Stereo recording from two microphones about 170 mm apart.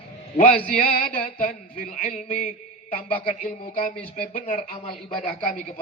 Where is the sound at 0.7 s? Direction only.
55° left (ahead or behind).